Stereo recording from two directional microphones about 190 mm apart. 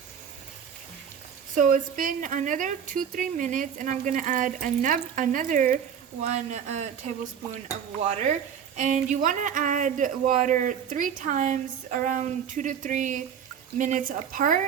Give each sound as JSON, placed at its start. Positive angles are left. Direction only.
{"t": 1.5, "sound": "a woman's voice", "side_deg": -45}